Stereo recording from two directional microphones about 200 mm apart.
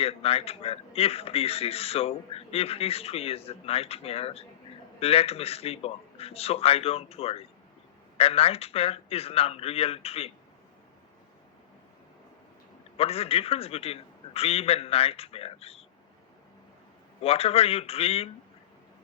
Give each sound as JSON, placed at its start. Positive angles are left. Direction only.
{"t": 0.0, "sound": "speech", "side_deg": 30}
{"t": 13.0, "sound": "speech", "side_deg": 30}
{"t": 17.2, "sound": "speech", "side_deg": 30}